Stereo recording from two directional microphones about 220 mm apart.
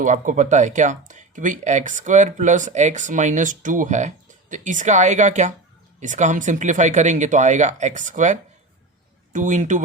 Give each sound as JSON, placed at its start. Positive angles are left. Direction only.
{"t": 0.0, "sound": "speech", "side_deg": -35}